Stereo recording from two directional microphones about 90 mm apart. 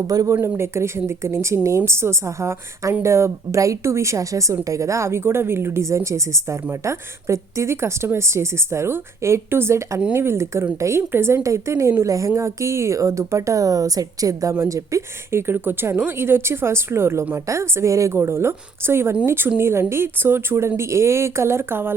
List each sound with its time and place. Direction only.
0.1 s speech: 45° right (ahead or behind)
0.4 s a woman's voice: 30° right (ahead or behind)